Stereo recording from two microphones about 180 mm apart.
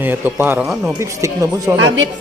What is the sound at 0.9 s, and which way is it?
Speech, 15° right (ahead or behind).